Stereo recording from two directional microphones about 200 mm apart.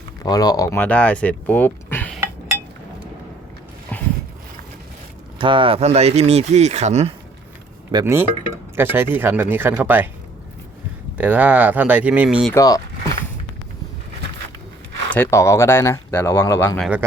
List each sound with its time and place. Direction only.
0.2 s speech: 20° left (ahead or behind)
5.4 s speech: 25° right (ahead or behind)
7.9 s speech: 10° right (ahead or behind)
11.2 s speech: 5° right (ahead or behind)
12.5 s speech: 20° left (ahead or behind)
15.1 s speech: 10° left (ahead or behind)
16.8 s speech: 5° right (ahead or behind)